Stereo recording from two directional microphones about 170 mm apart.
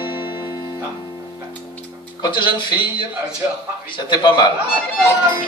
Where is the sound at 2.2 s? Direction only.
30° left (ahead or behind).